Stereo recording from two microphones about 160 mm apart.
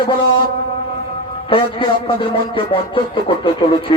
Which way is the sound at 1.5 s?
30° left (ahead or behind).